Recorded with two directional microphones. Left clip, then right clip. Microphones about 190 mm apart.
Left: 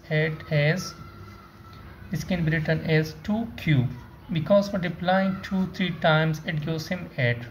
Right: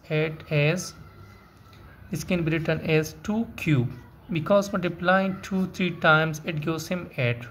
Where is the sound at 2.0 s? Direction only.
40° right (ahead or behind).